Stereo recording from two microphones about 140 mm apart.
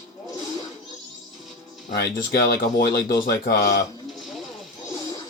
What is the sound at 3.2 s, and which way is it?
Speech, 80° left.